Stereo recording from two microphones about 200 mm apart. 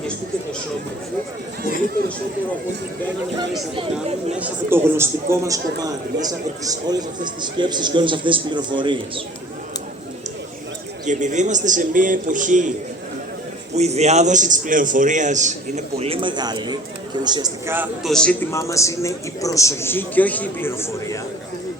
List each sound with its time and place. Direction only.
4.4 s a man's voice: 10° right (ahead or behind)
11.0 s a man's voice: 35° right (ahead or behind)
13.7 s a man's voice: 35° right (ahead or behind); by 17.8 s 15° right (ahead or behind)
18.0 s a man's voice: 5° left (ahead or behind)